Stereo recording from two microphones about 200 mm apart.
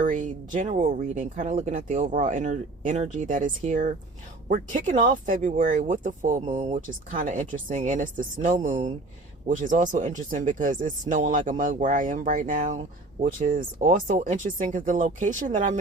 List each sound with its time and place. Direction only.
0.0 s speech: 40° right (ahead or behind)